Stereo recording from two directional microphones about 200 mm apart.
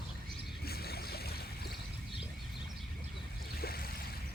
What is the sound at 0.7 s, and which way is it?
Boat, 50° left (ahead or behind).